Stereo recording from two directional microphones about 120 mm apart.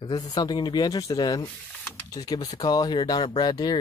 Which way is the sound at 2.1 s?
30° left (ahead or behind).